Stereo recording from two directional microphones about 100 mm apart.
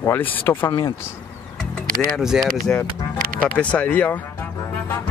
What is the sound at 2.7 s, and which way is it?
Speech, 15° left (ahead or behind).